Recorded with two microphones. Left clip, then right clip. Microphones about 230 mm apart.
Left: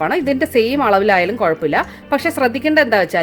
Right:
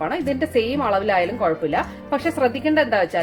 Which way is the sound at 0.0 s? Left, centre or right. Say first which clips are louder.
Left 6 dB; left.